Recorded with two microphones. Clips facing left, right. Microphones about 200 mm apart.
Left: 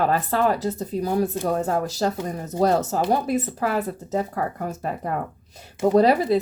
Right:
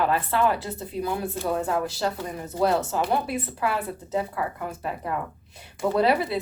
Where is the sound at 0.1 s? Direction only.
40° left (ahead or behind).